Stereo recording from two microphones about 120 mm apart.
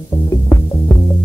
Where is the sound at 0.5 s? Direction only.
30° left (ahead or behind).